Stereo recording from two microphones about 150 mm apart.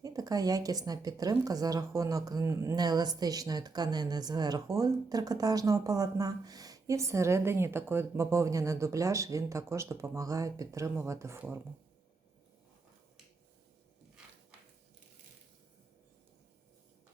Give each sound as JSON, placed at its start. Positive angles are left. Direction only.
{"t": 0.0, "sound": "a woman's voice", "side_deg": -25}